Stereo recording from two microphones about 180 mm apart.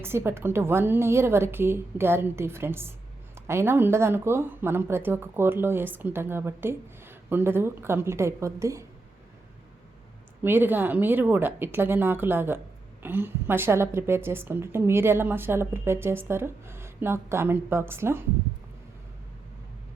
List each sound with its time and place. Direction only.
0.0 s speech: 15° right (ahead or behind)
10.4 s speech: 10° right (ahead or behind)